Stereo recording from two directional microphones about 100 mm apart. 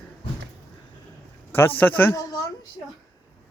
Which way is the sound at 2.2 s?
40° left (ahead or behind).